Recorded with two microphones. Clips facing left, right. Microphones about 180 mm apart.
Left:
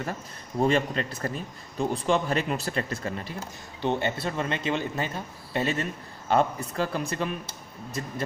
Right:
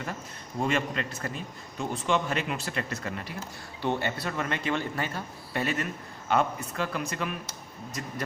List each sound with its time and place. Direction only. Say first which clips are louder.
0.6 s a man's voice: left 4 dB; 35° left (ahead or behind)